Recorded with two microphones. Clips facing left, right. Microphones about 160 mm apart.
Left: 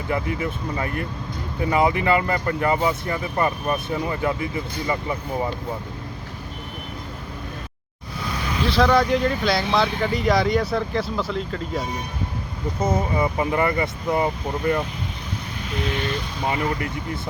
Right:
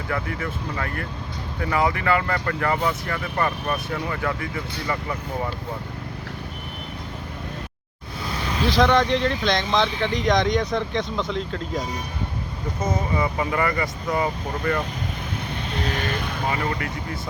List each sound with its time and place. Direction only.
0.1 s speech: 15° left (ahead or behind)
8.6 s speech: centre (ahead or behind)
12.8 s speech: 25° left (ahead or behind)
16.0 s speech: 50° right (ahead or behind)